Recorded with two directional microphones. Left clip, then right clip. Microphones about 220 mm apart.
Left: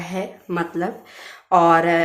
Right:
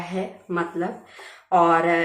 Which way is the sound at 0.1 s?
45° left (ahead or behind).